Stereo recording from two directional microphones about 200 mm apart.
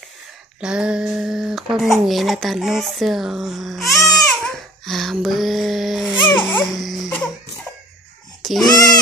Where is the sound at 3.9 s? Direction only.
15° left (ahead or behind).